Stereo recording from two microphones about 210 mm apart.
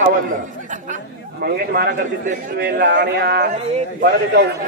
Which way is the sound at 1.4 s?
45° right (ahead or behind).